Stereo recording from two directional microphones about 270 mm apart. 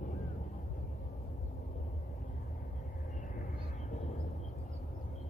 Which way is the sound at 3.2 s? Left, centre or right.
Left.